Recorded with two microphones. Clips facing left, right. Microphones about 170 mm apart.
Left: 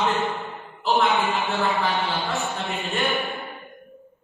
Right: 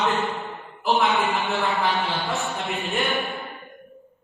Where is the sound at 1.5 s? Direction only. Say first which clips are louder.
Even; centre (ahead or behind).